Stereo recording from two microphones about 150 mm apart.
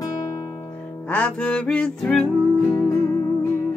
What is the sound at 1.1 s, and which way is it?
Music, 5° left (ahead or behind).